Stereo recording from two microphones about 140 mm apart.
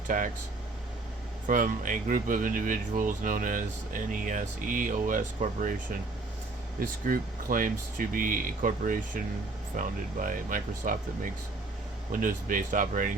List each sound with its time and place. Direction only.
0.1 s speech: 70° right (ahead or behind)
1.5 s speech: 75° right (ahead or behind)
6.7 s speech: 90° right; by 13.1 s 70° right (ahead or behind)